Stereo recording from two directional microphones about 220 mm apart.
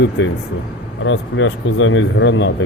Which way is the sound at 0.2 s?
55° left (ahead or behind).